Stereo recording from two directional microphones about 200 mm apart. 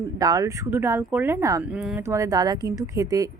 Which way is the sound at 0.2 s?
15° right (ahead or behind).